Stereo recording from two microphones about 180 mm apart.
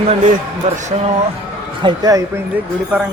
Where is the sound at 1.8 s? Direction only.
25° right (ahead or behind).